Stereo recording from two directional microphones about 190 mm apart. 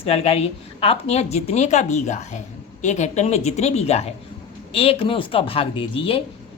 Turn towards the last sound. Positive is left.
turn(degrees=30)  # may be behind; listen again after turning